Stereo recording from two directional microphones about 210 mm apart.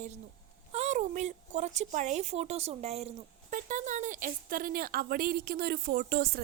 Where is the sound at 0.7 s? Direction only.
35° right (ahead or behind).